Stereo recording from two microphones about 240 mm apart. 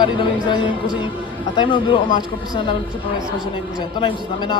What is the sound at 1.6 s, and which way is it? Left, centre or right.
Speech, left.